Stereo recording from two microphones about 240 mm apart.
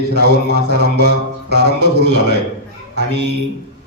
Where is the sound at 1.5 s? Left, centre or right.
Right.